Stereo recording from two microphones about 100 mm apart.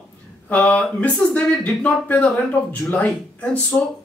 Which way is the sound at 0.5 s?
15° left (ahead or behind).